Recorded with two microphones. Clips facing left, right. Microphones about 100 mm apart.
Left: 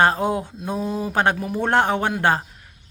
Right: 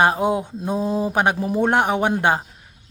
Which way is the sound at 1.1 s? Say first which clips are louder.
Right 1 dB; 15° right (ahead or behind).